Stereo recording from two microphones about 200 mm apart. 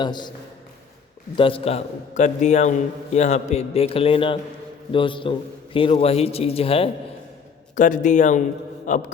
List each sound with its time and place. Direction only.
0.0 s a man's voice: 20° left (ahead or behind)
1.4 s a man's voice: 25° left (ahead or behind)
7.8 s a man's voice: 40° left (ahead or behind)